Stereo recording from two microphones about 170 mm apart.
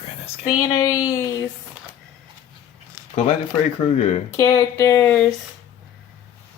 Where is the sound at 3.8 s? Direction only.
40° left (ahead or behind).